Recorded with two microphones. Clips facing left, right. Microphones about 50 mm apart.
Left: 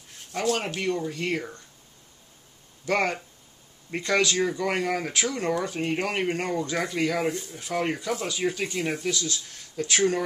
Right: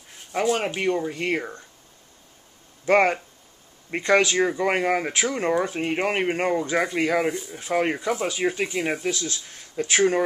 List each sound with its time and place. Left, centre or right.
0.3 s speech: centre
2.8 s speech: right